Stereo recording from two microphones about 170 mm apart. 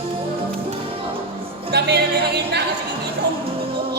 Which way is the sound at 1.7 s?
75° right (ahead or behind).